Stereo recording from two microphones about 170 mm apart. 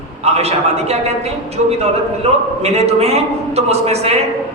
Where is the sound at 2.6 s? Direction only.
40° right (ahead or behind).